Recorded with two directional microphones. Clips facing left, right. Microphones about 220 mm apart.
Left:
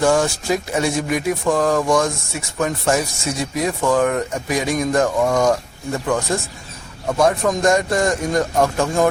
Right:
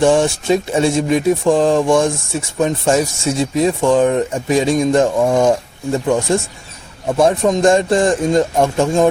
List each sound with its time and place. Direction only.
0.0 s speech: 25° right (ahead or behind)